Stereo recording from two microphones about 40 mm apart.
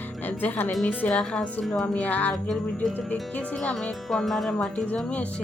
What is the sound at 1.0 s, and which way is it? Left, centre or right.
Speech, left.